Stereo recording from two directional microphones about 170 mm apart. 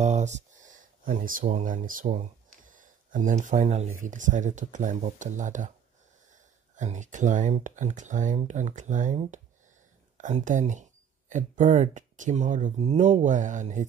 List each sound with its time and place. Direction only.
0.0 s speech: 45° right (ahead or behind)
6.7 s speech: 45° right (ahead or behind)